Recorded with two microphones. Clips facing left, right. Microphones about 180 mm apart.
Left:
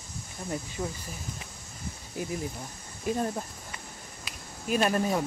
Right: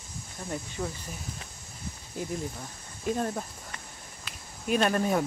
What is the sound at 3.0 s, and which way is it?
Speech, 10° left (ahead or behind).